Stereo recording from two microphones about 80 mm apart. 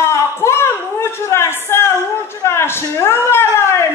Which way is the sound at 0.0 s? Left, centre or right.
Left.